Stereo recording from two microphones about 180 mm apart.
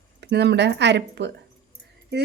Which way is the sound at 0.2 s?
70° right (ahead or behind).